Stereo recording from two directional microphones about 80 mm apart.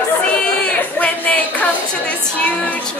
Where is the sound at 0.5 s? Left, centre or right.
Centre.